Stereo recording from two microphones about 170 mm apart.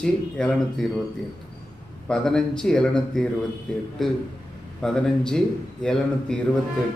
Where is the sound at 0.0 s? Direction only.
5° left (ahead or behind).